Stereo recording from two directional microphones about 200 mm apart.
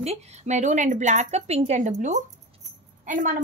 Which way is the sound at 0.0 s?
35° right (ahead or behind).